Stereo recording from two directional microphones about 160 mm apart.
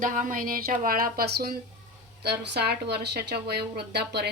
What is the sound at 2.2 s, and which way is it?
Speech, 90° right.